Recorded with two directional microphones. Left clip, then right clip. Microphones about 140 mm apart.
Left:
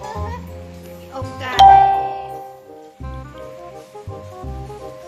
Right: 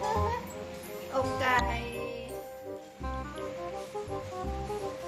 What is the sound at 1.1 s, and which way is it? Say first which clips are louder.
Music: left 1 dB; 25° left (ahead or behind).